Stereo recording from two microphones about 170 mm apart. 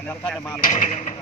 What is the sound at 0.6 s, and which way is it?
Speech, 45° left (ahead or behind).